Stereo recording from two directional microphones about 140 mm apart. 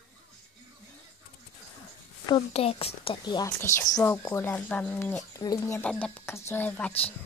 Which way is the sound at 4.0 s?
15° left (ahead or behind).